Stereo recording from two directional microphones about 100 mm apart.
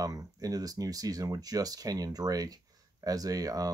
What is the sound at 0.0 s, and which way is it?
Speech, 40° right (ahead or behind).